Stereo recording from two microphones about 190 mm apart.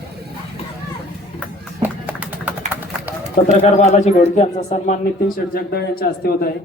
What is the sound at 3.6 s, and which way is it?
Speech, 35° left (ahead or behind).